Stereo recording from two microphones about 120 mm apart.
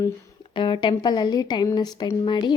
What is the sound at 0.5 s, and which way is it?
A woman's voice, 45° left (ahead or behind).